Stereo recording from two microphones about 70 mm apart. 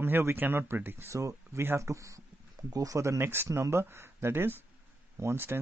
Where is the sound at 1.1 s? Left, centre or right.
Right.